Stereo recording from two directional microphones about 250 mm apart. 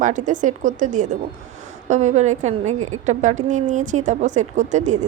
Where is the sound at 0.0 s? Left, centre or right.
Right.